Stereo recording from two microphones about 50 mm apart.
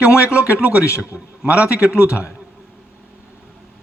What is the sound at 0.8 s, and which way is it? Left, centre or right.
Speech, left.